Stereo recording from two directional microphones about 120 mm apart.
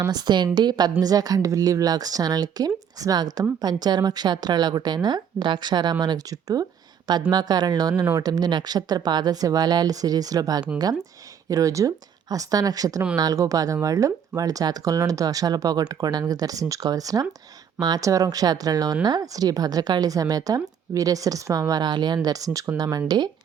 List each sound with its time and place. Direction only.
0.0 s a woman's voice: 35° right (ahead or behind)